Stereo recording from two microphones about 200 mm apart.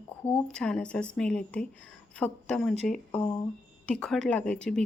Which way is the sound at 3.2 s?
25° left (ahead or behind).